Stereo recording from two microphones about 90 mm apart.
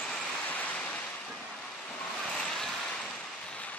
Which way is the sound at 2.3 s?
5° left (ahead or behind).